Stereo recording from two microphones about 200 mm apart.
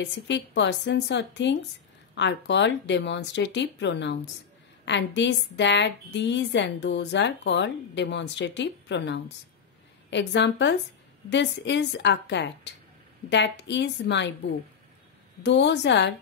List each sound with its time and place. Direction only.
0.0 s a woman's voice: 60° left (ahead or behind)